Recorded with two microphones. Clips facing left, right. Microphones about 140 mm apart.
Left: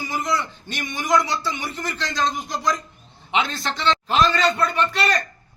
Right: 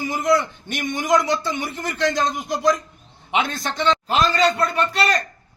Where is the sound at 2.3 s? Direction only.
20° right (ahead or behind).